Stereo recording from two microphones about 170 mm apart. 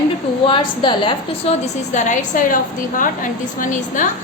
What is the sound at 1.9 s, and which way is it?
A woman's voice, 45° left (ahead or behind).